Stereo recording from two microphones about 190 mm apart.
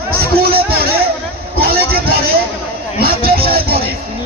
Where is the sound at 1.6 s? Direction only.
55° right (ahead or behind).